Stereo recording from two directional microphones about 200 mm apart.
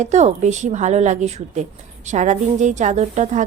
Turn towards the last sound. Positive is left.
turn(degrees=-35)  # may be behind; listen again after turning